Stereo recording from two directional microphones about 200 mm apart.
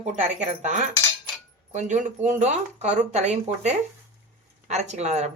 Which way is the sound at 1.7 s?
40° right (ahead or behind).